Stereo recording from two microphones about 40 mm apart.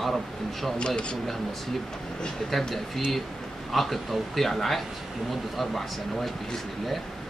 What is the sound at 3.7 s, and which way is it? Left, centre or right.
Speech, centre.